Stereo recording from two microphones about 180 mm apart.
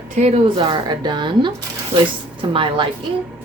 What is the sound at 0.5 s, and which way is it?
Speech, 25° right (ahead or behind).